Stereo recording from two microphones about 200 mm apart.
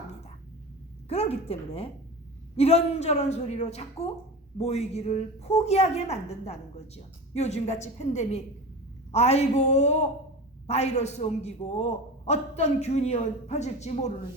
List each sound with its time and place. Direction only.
1.0 s a woman's voice: 30° left (ahead or behind)